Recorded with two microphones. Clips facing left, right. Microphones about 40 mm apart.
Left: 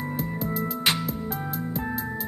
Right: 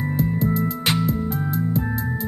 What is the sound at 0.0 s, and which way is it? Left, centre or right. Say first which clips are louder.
Music: right 7 dB; centre.